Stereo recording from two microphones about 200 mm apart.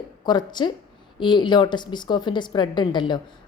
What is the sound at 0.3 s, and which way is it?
Speech, 20° left (ahead or behind).